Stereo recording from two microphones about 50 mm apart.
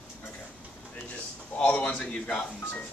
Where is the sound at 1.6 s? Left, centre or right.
Left.